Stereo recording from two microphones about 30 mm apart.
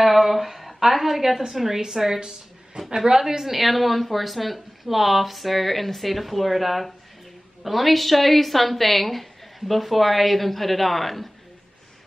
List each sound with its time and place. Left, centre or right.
0.0 s a sound: centre
0.7 s a woman's voice: centre
2.0 s a woman's voice: right
3.1 s a woman's voice: centre
3.5 s a woman's voice: centre